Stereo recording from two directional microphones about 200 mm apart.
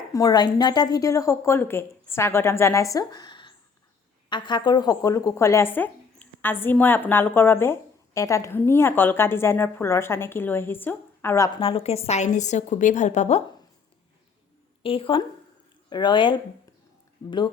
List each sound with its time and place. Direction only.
0.1 s a woman's voice: 15° left (ahead or behind)
11.6 s a woman's voice: 30° left (ahead or behind)
14.8 s speech: 25° left (ahead or behind)